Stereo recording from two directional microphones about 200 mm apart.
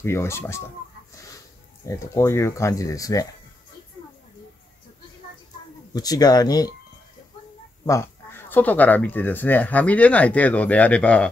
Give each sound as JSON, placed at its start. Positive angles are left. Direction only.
{"t": 0.0, "sound": "speech", "side_deg": 15}
{"t": 1.9, "sound": "speech", "side_deg": 15}
{"t": 5.9, "sound": "speech", "side_deg": 20}
{"t": 7.8, "sound": "speech", "side_deg": 15}